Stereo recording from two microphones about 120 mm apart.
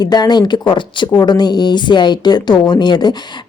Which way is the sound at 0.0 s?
35° left (ahead or behind).